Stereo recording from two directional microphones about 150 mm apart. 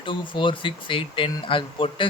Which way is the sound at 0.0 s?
35° left (ahead or behind).